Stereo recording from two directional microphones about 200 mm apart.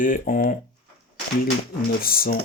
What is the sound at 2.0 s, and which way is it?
Speech, 50° left (ahead or behind).